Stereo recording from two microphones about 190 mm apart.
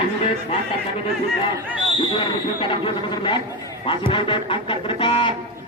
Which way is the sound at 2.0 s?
25° left (ahead or behind).